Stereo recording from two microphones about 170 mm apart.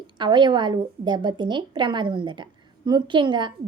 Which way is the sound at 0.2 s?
25° right (ahead or behind).